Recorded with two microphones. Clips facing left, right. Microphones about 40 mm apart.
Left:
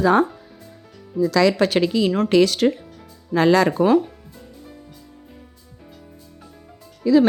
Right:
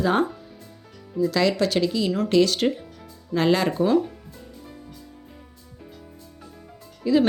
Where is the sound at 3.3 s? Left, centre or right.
Left.